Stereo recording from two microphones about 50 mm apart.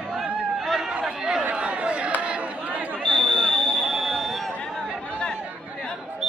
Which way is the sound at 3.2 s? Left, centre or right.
Centre.